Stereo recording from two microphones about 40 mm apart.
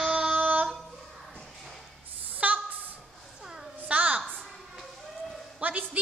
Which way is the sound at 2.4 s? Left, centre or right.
Right.